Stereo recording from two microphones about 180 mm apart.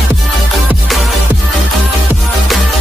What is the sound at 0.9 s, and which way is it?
Music, centre (ahead or behind).